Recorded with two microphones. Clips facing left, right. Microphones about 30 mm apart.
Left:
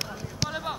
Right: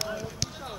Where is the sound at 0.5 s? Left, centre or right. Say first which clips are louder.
Left 7 dB; left.